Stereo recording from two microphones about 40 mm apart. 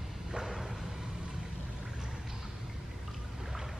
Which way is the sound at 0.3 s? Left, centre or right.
Centre.